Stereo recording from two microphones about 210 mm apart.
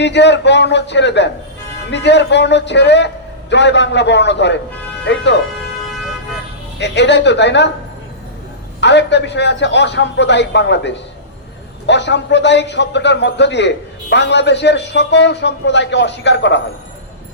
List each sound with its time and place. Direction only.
0.0 s a man's voice: 55° left (ahead or behind)
6.7 s a man's voice: 55° left (ahead or behind)
8.8 s a man's voice: 55° left (ahead or behind)